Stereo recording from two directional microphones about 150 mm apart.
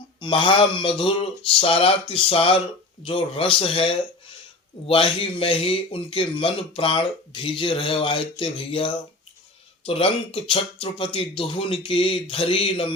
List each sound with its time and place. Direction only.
0.2 s speech: 35° left (ahead or behind)